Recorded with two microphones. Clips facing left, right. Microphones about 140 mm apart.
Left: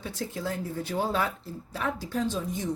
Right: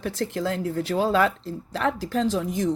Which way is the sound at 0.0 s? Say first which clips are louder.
Right 7 dB; 90° right.